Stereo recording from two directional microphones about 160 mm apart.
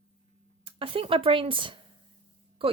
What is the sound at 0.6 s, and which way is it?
Speech, 35° right (ahead or behind).